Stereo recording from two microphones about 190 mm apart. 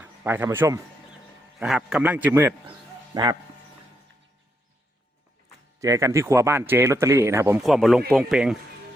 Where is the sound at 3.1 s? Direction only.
20° right (ahead or behind).